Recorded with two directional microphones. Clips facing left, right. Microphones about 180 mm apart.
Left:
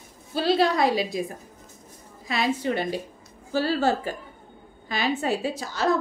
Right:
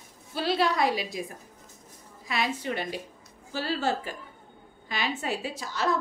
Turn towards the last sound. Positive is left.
turn(degrees=35)  # may be behind; listen again after turning